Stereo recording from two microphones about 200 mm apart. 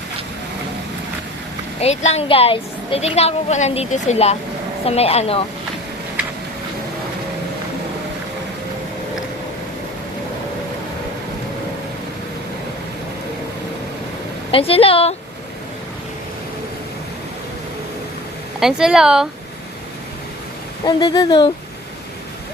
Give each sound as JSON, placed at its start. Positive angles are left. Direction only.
{"t": 1.8, "sound": "a woman's voice", "side_deg": 35}
{"t": 14.5, "sound": "speech", "side_deg": 30}
{"t": 18.6, "sound": "speech", "side_deg": -5}
{"t": 20.8, "sound": "speech", "side_deg": 20}